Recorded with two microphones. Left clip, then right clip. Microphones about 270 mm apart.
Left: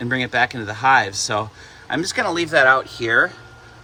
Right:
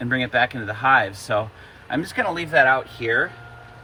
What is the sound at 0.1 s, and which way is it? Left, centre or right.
Speech, left.